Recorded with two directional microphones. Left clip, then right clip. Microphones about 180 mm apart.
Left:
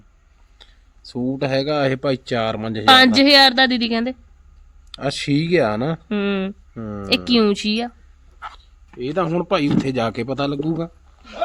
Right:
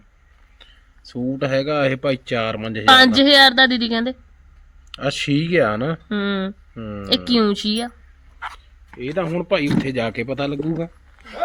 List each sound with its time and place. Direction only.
1.2 s speech: 10° left (ahead or behind)
8.4 s dog: centre (ahead or behind)
9.0 s speech: 15° left (ahead or behind)